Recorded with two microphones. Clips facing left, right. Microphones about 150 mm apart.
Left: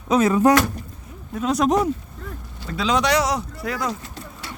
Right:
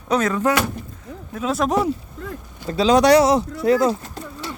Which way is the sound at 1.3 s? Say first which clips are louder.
Left 1 dB; centre (ahead or behind).